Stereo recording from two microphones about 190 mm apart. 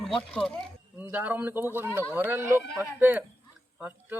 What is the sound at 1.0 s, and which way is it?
A man's voice, 10° right (ahead or behind).